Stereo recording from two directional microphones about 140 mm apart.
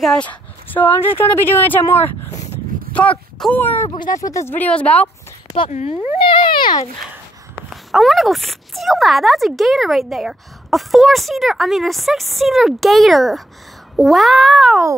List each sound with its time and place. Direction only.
0.0 s speech: 5° left (ahead or behind)
5.7 s speech: 55° left (ahead or behind)
6.2 s a child's voice: 35° left (ahead or behind)
7.7 s speech: centre (ahead or behind)